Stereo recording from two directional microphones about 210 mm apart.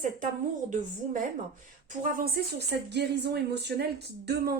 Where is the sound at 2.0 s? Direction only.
45° right (ahead or behind).